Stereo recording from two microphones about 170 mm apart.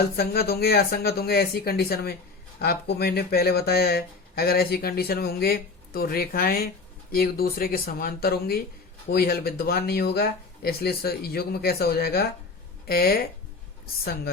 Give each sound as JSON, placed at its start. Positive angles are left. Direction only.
{"t": 0.2, "sound": "speech", "side_deg": 65}